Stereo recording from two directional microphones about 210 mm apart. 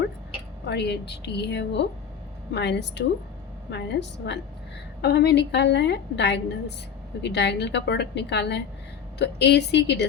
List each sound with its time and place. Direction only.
0.7 s a woman's voice: 50° left (ahead or behind)